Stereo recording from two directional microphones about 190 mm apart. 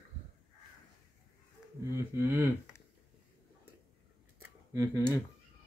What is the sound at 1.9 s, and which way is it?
Speech, 10° right (ahead or behind).